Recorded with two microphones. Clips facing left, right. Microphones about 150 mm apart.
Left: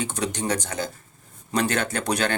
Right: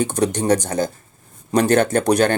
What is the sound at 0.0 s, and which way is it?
Speech, 45° right (ahead or behind).